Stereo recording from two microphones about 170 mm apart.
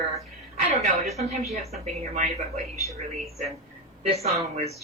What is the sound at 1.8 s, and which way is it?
Speech, 40° right (ahead or behind).